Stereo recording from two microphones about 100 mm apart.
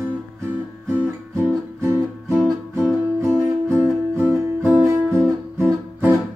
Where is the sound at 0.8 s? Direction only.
25° right (ahead or behind).